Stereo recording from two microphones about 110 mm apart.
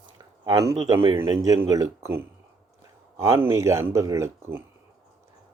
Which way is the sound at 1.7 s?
30° right (ahead or behind).